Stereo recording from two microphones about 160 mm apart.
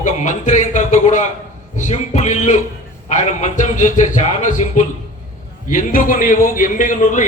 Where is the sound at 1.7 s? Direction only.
50° left (ahead or behind).